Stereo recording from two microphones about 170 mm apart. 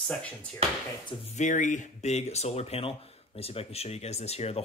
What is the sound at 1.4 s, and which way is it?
Speech, 50° left (ahead or behind).